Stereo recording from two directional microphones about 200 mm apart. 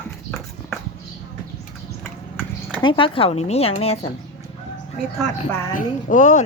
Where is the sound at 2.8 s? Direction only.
25° left (ahead or behind).